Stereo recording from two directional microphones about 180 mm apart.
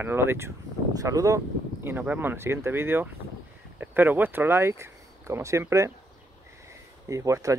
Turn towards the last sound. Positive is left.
turn(degrees=-15)  # may be behind; listen again after turning